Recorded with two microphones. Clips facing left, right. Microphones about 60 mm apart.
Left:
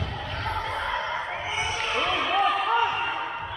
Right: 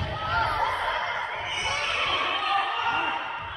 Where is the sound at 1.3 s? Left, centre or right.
Centre.